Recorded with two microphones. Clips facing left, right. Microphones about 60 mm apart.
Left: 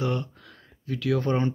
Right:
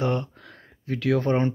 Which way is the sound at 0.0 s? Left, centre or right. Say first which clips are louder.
Right 3 dB; right.